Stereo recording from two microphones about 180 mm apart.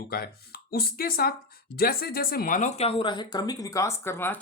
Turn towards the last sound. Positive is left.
turn(degrees=15)  # may be behind; listen again after turning